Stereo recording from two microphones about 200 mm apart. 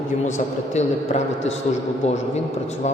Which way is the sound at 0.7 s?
35° left (ahead or behind).